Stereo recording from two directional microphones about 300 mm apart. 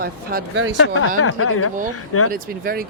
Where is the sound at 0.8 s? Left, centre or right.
Left.